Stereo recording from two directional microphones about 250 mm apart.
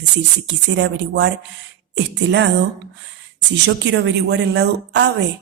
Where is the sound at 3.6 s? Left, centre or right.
Right.